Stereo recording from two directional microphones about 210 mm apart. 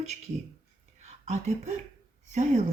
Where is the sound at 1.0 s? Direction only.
35° right (ahead or behind).